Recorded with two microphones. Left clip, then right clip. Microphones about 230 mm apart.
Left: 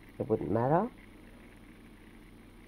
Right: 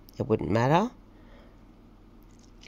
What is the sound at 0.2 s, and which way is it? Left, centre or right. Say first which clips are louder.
Speech: right 4 dB; right.